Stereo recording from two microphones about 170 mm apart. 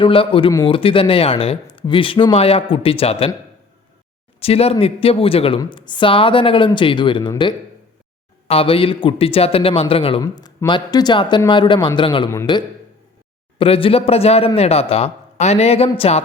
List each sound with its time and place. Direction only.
0.0 s a man's voice: 30° left (ahead or behind)
4.4 s a man's voice: 35° left (ahead or behind)
13.6 s a man's voice: 30° left (ahead or behind)